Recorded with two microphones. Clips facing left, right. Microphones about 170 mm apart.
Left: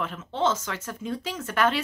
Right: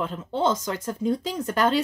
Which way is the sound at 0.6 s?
35° right (ahead or behind).